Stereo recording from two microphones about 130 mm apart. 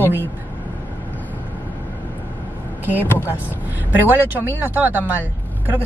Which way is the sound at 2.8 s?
15° right (ahead or behind).